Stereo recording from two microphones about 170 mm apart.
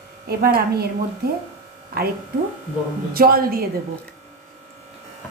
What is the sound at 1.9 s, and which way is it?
Speech, 65° right (ahead or behind).